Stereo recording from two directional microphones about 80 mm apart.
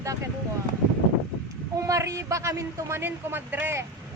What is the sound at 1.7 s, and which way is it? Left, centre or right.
A woman's voice, right.